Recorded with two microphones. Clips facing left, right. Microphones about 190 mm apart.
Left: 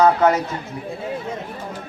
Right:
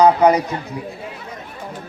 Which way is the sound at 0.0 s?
15° right (ahead or behind).